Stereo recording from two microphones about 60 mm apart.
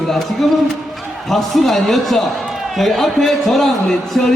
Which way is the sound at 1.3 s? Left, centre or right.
Centre.